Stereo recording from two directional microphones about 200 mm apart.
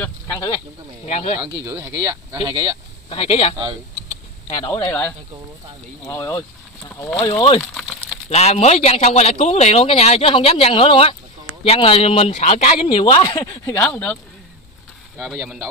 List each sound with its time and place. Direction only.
1.0 s a man's voice: 35° left (ahead or behind)
1.4 s speech: 15° right (ahead or behind)
3.1 s speech: 30° left (ahead or behind)
4.6 s speech: 15° left (ahead or behind)
6.0 s speech: 15° left (ahead or behind)
7.2 s a man's voice: 25° left (ahead or behind)
15.1 s speech: centre (ahead or behind)